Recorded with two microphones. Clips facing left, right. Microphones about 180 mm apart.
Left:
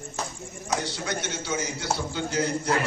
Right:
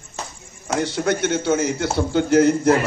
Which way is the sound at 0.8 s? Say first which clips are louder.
Right 14 dB; 55° right (ahead or behind).